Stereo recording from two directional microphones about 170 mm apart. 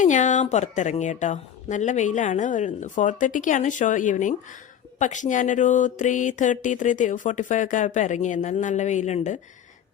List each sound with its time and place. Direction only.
0.0 s mantra: 45° left (ahead or behind)